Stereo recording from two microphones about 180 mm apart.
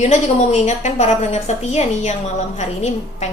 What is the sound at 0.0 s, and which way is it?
A woman's voice, 40° left (ahead or behind).